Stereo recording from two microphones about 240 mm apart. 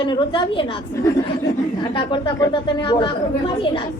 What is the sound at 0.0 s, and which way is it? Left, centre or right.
Speech, centre.